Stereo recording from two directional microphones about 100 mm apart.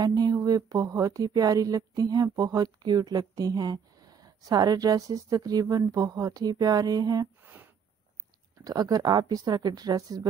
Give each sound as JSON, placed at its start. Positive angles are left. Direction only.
{"t": 0.0, "sound": "speech", "side_deg": -40}
{"t": 7.4, "sound": "a sound", "side_deg": -20}
{"t": 8.6, "sound": "speech", "side_deg": -40}